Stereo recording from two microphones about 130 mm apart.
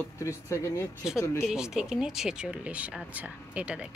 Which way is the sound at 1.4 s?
5° right (ahead or behind).